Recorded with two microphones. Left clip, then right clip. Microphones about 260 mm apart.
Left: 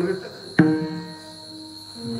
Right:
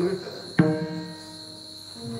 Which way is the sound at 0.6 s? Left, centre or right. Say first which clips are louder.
Left 5 dB; left.